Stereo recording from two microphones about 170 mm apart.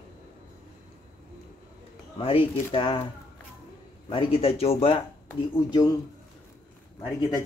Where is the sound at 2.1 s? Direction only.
30° left (ahead or behind).